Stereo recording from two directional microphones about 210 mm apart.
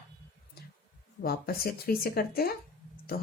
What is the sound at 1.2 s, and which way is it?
Speech, 45° left (ahead or behind).